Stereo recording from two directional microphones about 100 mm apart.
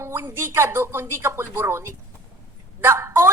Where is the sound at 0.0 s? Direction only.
25° right (ahead or behind).